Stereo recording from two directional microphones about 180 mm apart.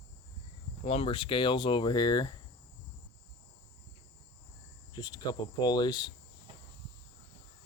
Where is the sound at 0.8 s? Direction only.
30° left (ahead or behind).